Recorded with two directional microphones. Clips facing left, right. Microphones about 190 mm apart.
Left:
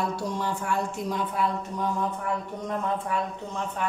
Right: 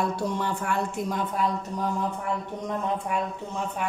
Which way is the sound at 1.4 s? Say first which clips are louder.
Even; 40° right (ahead or behind).